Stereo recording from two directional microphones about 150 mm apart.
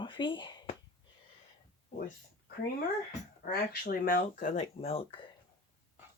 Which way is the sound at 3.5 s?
80° left.